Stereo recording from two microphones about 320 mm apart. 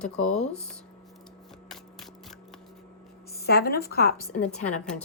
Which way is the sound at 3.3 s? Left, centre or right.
Left.